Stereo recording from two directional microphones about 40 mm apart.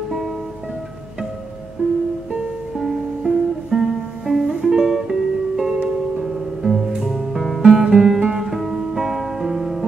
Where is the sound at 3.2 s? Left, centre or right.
Centre.